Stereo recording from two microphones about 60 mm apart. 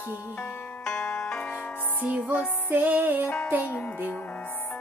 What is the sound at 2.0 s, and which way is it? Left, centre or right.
Music, right.